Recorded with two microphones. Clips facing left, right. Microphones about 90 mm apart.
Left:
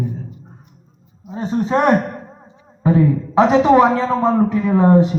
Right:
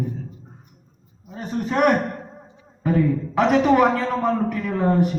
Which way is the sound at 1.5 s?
20° left (ahead or behind).